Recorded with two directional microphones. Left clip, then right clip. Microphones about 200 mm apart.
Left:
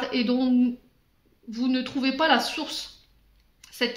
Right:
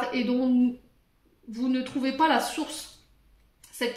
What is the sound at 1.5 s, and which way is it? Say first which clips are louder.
Speech: left 2 dB; 40° left (ahead or behind).